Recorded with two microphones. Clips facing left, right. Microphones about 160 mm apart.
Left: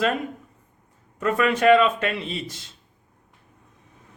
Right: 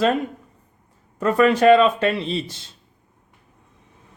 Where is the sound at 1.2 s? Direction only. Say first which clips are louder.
Right 4 dB; 35° right (ahead or behind).